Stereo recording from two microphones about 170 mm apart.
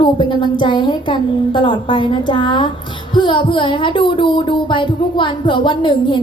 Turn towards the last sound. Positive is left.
turn(degrees=30)  # may be behind; listen again after turning